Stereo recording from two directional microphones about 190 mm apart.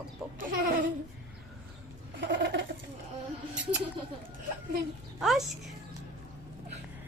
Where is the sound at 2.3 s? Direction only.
70° right (ahead or behind).